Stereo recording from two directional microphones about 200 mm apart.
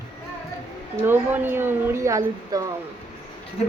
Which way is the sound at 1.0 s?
10° right (ahead or behind).